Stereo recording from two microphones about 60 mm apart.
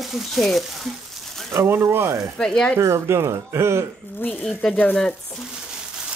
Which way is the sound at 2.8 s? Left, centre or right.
Right.